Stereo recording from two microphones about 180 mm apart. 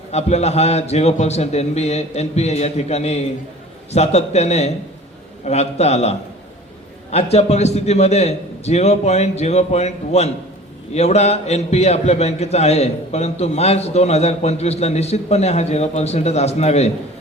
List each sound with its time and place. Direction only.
0.1 s a man's voice: 35° left (ahead or behind)